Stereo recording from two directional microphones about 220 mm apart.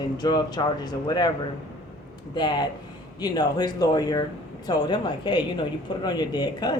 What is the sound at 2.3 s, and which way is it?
Speech, 20° left (ahead or behind).